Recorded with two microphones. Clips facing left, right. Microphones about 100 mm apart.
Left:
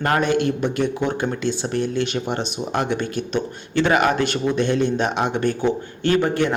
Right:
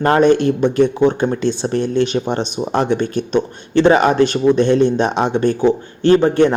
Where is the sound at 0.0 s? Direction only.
30° right (ahead or behind).